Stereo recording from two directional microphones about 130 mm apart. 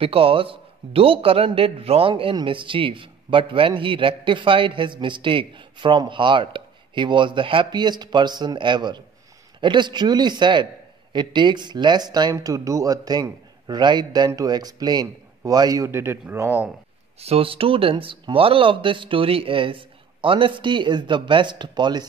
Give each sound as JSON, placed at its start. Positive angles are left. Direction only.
{"t": 0.0, "sound": "a man's voice", "side_deg": -45}
{"t": 17.2, "sound": "a man's voice", "side_deg": -50}